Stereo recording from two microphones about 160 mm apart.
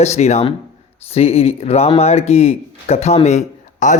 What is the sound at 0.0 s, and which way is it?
Speech, 45° left (ahead or behind).